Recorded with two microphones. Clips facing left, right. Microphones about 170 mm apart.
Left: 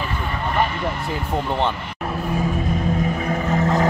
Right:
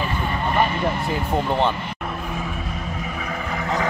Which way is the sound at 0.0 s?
20° right (ahead or behind).